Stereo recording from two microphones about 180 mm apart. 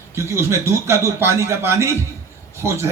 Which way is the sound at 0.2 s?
15° right (ahead or behind).